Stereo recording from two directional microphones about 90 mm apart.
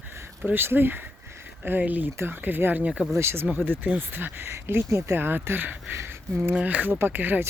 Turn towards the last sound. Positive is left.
turn(degrees=-20)  # may be behind; listen again after turning